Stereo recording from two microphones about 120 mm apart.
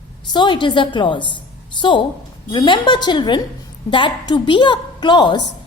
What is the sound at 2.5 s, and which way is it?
A woman's voice, 40° left (ahead or behind).